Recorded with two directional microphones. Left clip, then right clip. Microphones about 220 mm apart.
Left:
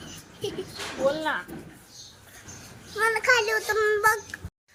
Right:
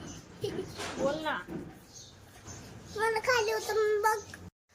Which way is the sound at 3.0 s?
15° left (ahead or behind).